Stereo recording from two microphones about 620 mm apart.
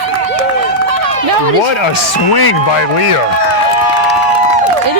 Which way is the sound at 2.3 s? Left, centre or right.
Left.